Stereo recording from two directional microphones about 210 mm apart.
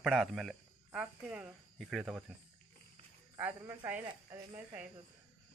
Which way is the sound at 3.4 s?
10° right (ahead or behind).